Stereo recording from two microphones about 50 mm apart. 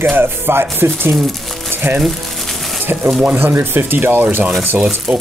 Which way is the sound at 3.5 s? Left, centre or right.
Right.